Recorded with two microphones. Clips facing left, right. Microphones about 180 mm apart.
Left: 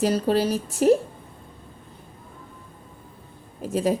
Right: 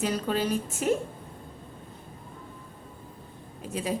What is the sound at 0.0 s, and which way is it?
Speech, 40° left (ahead or behind).